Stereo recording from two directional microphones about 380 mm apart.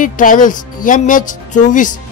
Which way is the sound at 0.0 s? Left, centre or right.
Left.